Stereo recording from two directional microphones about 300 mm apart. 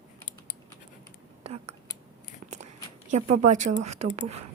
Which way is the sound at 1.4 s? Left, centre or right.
Right.